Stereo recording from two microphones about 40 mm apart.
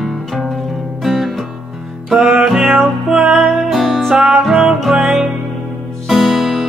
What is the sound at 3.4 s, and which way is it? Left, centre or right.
Music, centre.